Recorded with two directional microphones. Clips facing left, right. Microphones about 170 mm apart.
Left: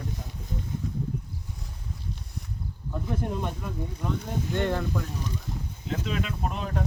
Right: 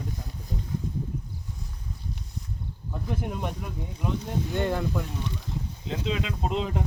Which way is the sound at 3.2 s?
10° right (ahead or behind).